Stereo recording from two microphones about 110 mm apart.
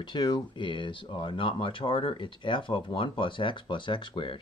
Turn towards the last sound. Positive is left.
turn(degrees=50)  # may be behind; listen again after turning